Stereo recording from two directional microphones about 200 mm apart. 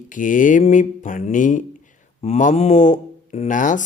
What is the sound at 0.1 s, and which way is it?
Speech, 40° left (ahead or behind).